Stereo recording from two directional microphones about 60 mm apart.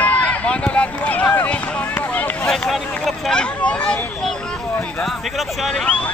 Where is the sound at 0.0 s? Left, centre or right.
Left.